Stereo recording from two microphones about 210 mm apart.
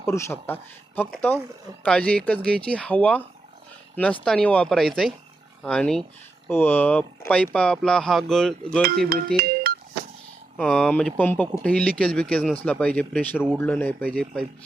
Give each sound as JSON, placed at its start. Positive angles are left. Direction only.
{"t": 0.0, "sound": "speech", "side_deg": 15}
{"t": 9.0, "sound": "speech", "side_deg": -45}
{"t": 10.6, "sound": "speech", "side_deg": 0}
{"t": 10.9, "sound": "speech", "side_deg": 10}